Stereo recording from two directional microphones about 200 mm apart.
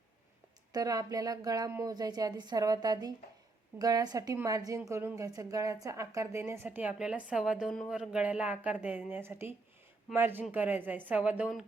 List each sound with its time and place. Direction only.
0.7 s a woman's voice: 20° right (ahead or behind)